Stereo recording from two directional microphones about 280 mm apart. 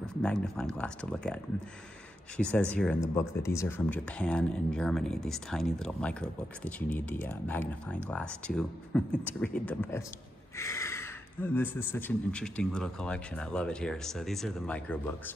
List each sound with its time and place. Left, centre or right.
0.0 s speech: centre